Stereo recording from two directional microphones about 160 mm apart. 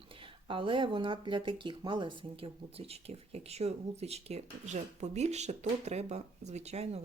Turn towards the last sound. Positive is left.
turn(degrees=-40)  # may be behind; listen again after turning